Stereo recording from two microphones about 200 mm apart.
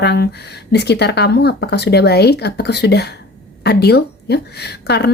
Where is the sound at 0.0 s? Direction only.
55° left (ahead or behind).